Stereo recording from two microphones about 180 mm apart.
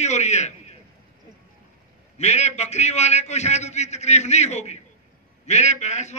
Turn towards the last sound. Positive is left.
turn(degrees=40)  # may be behind; listen again after turning